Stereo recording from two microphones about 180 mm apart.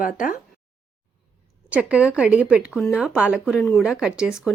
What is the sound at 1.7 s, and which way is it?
Speech, 5° right (ahead or behind).